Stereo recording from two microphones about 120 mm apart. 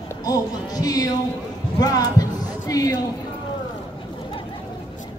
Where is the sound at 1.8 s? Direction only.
30° left (ahead or behind).